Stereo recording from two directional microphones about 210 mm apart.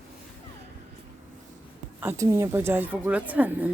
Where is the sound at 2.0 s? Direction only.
15° right (ahead or behind).